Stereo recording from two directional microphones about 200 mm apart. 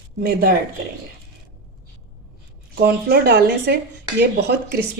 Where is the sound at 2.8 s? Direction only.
55° right (ahead or behind).